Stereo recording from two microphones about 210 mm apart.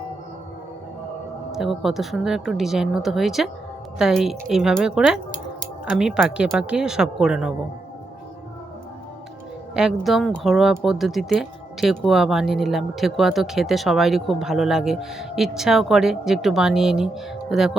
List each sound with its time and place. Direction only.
1.5 s speech: centre (ahead or behind)
9.7 s speech: centre (ahead or behind)